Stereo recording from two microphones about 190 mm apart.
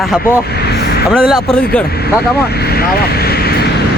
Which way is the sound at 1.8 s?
55° left (ahead or behind).